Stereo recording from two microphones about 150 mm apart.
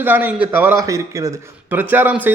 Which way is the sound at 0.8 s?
20° right (ahead or behind).